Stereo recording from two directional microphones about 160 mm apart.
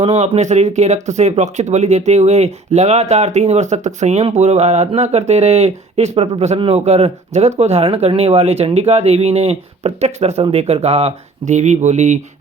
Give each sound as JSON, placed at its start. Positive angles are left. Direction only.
{"t": 0.0, "sound": "speech", "side_deg": -40}